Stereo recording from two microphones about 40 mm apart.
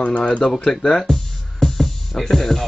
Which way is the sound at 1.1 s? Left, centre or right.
Centre.